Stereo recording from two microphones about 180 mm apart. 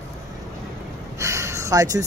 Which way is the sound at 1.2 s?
15° right (ahead or behind).